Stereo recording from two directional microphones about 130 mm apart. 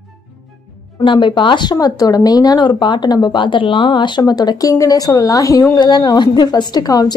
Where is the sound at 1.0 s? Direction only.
35° left (ahead or behind).